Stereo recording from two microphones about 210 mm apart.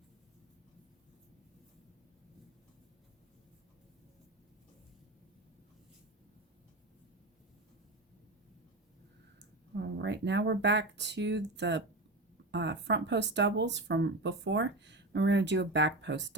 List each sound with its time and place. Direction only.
9.7 s speech: 55° right (ahead or behind)